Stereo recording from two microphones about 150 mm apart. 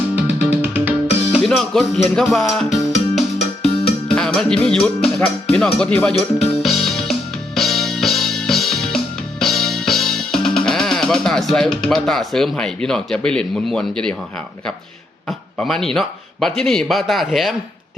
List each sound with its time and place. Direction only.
0.7 s music: 10° right (ahead or behind)
1.5 s music: 5° left (ahead or behind)
3.3 s music: 45° left (ahead or behind)
4.1 s music: 5° left (ahead or behind)
15.3 s speech: centre (ahead or behind)